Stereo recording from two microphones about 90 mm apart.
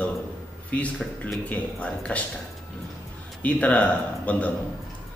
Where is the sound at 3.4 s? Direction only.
15° left (ahead or behind).